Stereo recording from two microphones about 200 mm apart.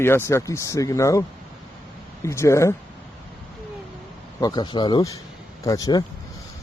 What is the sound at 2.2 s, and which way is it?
Speech, 15° left (ahead or behind).